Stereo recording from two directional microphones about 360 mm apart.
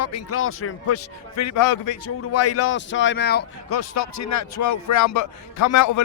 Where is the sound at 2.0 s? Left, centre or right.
Left.